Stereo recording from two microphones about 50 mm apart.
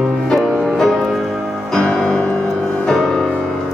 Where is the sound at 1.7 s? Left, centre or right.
Centre.